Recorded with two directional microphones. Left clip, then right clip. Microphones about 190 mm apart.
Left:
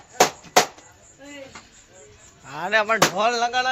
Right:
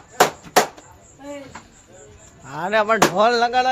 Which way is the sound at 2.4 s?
15° right (ahead or behind).